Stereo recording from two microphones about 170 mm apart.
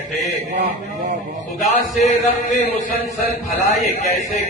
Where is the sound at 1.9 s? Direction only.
45° left (ahead or behind).